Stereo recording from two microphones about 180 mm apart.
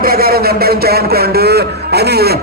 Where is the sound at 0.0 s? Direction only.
55° right (ahead or behind).